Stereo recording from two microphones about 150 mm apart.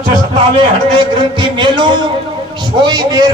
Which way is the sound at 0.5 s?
30° right (ahead or behind).